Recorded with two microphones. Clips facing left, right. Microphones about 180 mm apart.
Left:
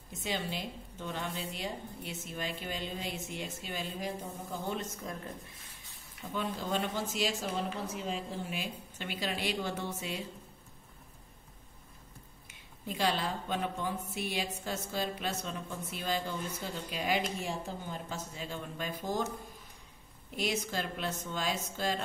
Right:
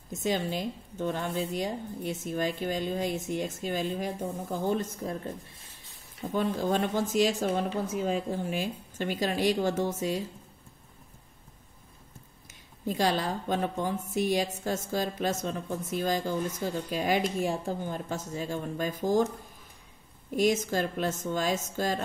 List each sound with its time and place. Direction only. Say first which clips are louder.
0.1 s speech: right 7 dB; 45° right (ahead or behind)
6.3 s speech: right 7 dB; 45° right (ahead or behind)
12.8 s speech: right 5 dB; 40° right (ahead or behind)
20.3 s speech: right 8 dB; 45° right (ahead or behind)